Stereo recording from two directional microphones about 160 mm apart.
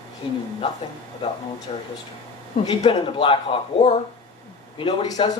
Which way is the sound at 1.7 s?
35° left (ahead or behind).